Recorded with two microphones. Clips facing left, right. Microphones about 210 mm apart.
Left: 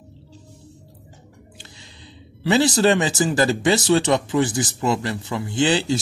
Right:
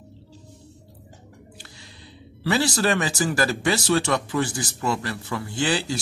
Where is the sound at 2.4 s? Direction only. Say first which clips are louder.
Left 5 dB; 20° left (ahead or behind).